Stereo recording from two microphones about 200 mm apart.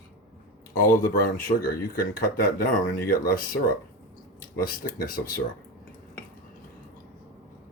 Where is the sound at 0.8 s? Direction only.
45° left (ahead or behind).